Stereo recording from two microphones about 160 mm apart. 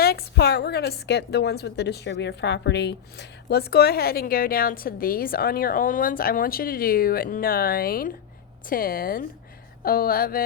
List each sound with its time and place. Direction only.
0.0 s a woman's voice: 75° left (ahead or behind)